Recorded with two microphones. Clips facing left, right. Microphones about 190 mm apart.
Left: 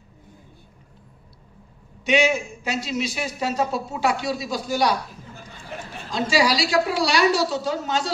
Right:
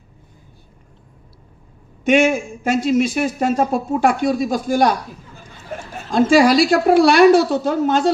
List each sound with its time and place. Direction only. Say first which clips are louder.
2.0 s a man's voice: right 6 dB; 50° right (ahead or behind)
5.9 s a man's voice: right 9 dB; 50° right (ahead or behind)